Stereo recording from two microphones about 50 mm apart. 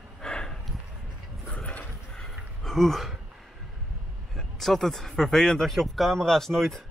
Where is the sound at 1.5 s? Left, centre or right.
Left.